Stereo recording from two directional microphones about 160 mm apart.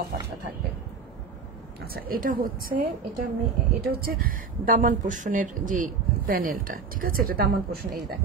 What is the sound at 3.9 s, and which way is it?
Speech, 65° right (ahead or behind).